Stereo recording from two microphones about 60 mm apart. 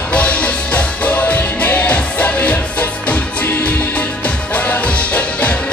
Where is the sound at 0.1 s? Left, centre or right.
Left.